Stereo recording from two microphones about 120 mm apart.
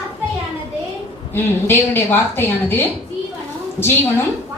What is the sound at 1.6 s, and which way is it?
Speech, 20° left (ahead or behind).